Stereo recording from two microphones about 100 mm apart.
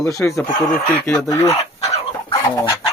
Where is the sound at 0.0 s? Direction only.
30° left (ahead or behind).